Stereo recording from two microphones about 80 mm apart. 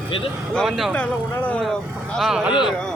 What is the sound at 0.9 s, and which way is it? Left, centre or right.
Speech, centre.